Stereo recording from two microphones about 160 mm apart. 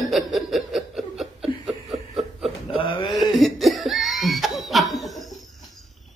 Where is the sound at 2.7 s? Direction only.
35° left (ahead or behind).